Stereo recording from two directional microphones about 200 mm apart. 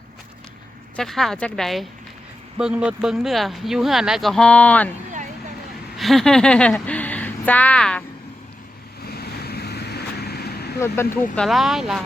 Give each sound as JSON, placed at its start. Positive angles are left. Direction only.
{"t": 0.9, "sound": "speech", "side_deg": 0}
{"t": 6.0, "sound": "speech", "side_deg": 0}
{"t": 9.0, "sound": "vehicle", "side_deg": 50}
{"t": 10.8, "sound": "speech", "side_deg": 15}
{"t": 11.3, "sound": "speech", "side_deg": 0}